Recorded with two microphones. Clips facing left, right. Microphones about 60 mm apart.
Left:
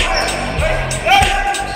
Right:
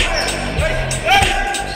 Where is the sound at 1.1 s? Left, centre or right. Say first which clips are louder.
Left 3 dB; centre.